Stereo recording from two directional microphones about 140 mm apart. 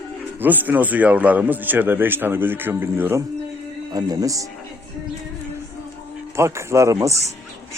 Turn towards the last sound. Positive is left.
turn(degrees=-20)  # may be behind; listen again after turning